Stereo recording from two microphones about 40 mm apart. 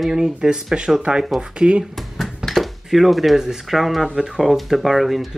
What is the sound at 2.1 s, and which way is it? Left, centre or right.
Dishes, centre.